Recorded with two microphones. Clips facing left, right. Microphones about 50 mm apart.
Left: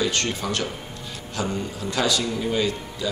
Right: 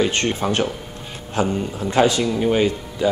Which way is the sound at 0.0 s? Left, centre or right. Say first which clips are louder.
Right 5 dB; right.